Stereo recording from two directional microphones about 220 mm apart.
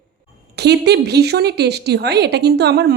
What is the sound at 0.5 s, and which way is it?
Speech, 50° right (ahead or behind).